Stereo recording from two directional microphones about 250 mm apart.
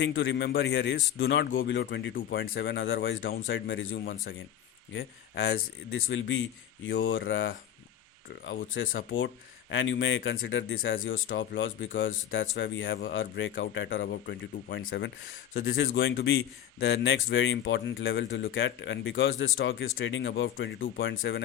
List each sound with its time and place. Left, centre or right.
0.0 s a man's voice: left
9.0 s a man's voice: left